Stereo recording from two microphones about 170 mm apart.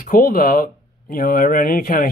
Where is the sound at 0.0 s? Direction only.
55° left (ahead or behind).